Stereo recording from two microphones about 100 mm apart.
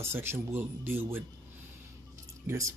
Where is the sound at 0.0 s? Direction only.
25° right (ahead or behind).